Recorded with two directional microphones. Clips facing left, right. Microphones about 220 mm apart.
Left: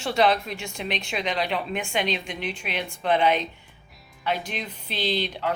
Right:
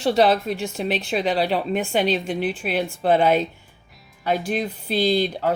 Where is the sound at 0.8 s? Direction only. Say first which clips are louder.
Right 4 dB; 35° right (ahead or behind).